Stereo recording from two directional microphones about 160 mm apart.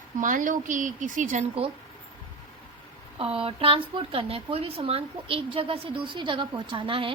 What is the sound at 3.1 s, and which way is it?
A woman's voice, 35° right (ahead or behind).